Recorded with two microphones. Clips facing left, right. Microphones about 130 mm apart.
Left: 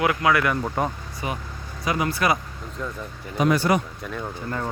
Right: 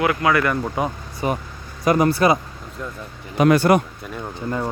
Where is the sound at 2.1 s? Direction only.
30° right (ahead or behind).